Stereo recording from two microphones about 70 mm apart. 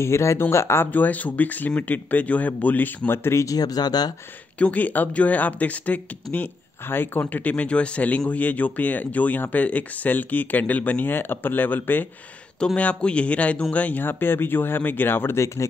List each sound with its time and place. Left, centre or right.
0.0 s speech: left
3.4 s speech: left
4.6 s speech: left
12.5 s speech: centre; by 15.6 s left